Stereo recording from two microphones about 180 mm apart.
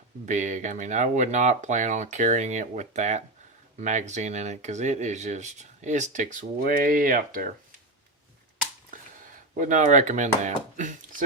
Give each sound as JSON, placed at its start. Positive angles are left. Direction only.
{"t": 0.3, "sound": "speech", "side_deg": -40}
{"t": 8.9, "sound": "speech", "side_deg": -45}